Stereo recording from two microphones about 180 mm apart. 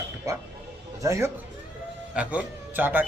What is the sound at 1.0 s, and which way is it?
A man's voice, 15° right (ahead or behind).